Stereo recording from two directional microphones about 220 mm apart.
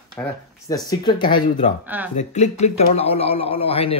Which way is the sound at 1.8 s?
10° right (ahead or behind).